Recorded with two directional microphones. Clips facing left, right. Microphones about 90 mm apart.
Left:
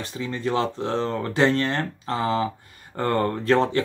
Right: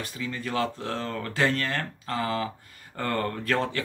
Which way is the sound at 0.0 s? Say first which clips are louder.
Left 5 dB; 25° left (ahead or behind).